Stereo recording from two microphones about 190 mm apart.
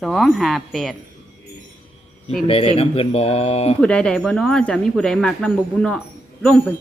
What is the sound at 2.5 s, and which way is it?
Speech, 30° left (ahead or behind).